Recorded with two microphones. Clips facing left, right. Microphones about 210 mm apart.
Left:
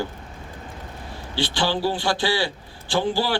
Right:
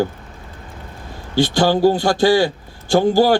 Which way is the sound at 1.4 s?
45° right (ahead or behind).